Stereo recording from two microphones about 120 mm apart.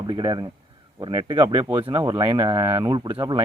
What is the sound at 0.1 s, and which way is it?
Speech, 40° right (ahead or behind).